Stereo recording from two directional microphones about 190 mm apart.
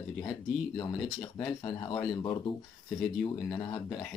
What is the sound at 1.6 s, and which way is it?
Speech, 25° left (ahead or behind).